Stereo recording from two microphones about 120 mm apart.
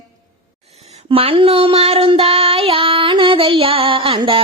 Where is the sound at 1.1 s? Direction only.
50° right (ahead or behind).